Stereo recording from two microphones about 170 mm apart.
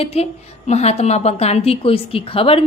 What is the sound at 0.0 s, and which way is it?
A woman's voice, 35° left (ahead or behind).